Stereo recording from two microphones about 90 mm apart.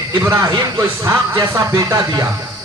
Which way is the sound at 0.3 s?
35° right (ahead or behind).